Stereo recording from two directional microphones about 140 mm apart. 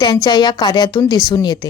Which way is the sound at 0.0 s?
30° left (ahead or behind).